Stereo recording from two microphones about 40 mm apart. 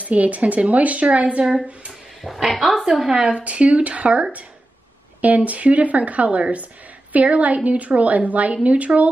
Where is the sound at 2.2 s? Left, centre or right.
Centre.